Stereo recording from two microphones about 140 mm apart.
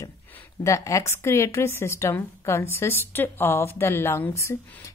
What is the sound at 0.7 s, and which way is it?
A woman's voice, 20° left (ahead or behind).